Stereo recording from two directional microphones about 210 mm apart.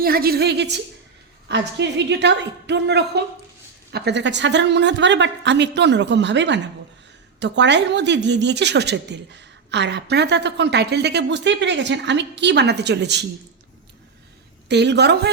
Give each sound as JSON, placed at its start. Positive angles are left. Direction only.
{"t": 0.0, "sound": "a woman's voice", "side_deg": -45}
{"t": 14.7, "sound": "a woman's voice", "side_deg": -55}